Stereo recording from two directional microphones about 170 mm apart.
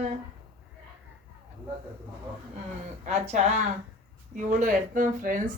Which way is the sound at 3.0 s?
40° right (ahead or behind).